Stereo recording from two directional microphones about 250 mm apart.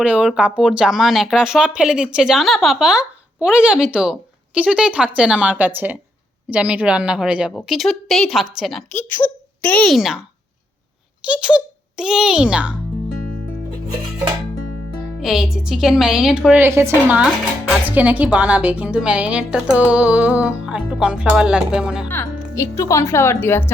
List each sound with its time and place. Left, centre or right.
0.0 s a woman's voice: centre
11.3 s a woman's voice: centre
15.2 s a woman's voice: centre
22.1 s speech: centre